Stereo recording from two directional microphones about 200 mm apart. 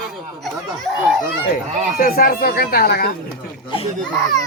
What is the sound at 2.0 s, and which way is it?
Speech, 45° left (ahead or behind).